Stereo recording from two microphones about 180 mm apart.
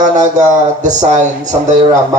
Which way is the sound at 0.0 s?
40° right (ahead or behind).